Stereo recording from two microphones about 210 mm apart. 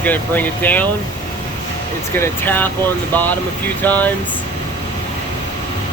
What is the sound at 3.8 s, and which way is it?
Speech, 10° left (ahead or behind).